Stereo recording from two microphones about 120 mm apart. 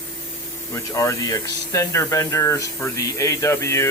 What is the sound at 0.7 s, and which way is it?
Speech, 25° left (ahead or behind).